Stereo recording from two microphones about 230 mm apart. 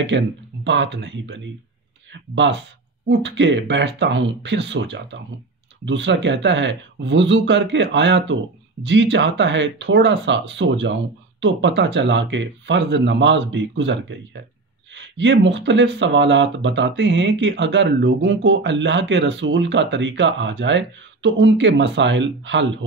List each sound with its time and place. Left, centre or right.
0.1 s speech: right